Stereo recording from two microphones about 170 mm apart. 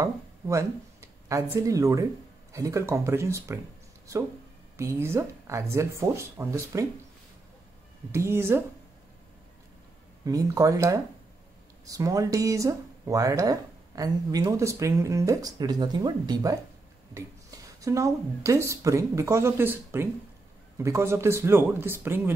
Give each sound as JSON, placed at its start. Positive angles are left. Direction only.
{"t": 0.0, "sound": "speech", "side_deg": -20}
{"t": 4.7, "sound": "speech", "side_deg": -15}
{"t": 8.1, "sound": "speech", "side_deg": -15}
{"t": 10.2, "sound": "speech", "side_deg": -20}